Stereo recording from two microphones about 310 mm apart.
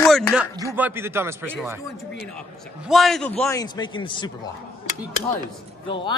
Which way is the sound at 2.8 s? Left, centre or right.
Centre.